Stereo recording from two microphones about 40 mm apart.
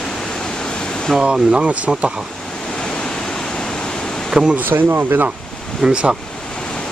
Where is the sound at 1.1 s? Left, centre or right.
Centre.